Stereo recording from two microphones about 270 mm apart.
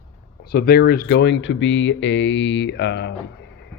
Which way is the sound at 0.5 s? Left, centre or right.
Left.